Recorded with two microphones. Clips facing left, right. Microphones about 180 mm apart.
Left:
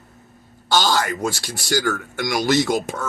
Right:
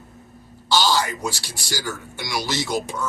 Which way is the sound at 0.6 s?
50° left (ahead or behind).